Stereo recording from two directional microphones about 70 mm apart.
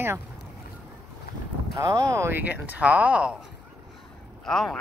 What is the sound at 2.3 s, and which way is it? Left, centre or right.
Speech, right.